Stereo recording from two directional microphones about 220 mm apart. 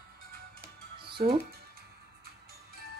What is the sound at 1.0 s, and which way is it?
Music, 20° right (ahead or behind).